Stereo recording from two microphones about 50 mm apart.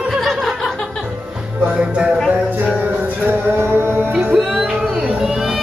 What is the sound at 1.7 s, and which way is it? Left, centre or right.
Music, right.